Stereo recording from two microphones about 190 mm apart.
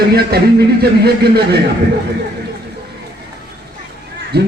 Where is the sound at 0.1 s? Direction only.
55° right (ahead or behind).